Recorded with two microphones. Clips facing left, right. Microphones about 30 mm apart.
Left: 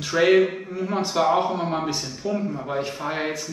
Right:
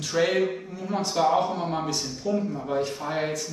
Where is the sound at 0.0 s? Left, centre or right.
Left.